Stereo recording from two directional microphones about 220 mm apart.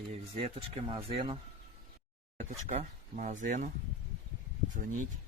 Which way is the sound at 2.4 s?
30° right (ahead or behind).